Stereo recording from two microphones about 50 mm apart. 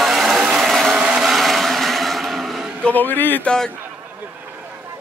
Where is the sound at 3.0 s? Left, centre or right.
Left.